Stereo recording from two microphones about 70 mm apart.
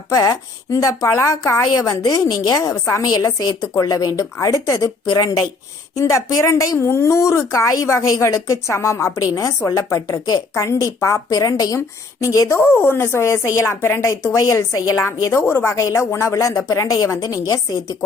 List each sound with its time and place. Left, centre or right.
0.1 s a woman's voice: left
6.0 s a woman's voice: left
8.0 s a woman's voice: left
11.3 s speech: left
11.8 s a woman's voice: left
14.3 s a woman's voice: left
15.3 s a woman's voice: left